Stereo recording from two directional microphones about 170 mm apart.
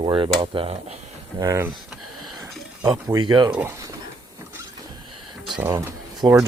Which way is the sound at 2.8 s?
20° right (ahead or behind).